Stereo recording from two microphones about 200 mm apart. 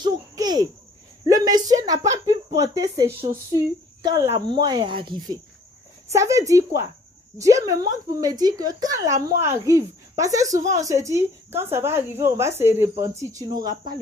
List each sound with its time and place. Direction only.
0.0 s cricket: 20° right (ahead or behind)
1.2 s a woman's voice: 20° right (ahead or behind)